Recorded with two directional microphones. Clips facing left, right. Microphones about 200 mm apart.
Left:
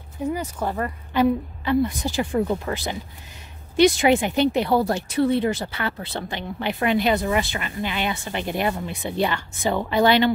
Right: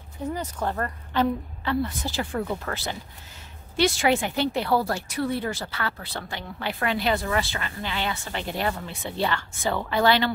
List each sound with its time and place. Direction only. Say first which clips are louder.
0.3 s speech: left 2 dB; 10° left (ahead or behind)